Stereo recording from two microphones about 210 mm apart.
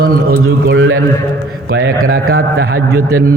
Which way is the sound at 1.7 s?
75° right (ahead or behind).